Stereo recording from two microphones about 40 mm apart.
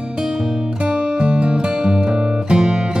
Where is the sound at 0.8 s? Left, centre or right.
Right.